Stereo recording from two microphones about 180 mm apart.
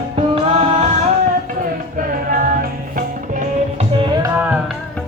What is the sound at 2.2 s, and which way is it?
Music, 50° right (ahead or behind).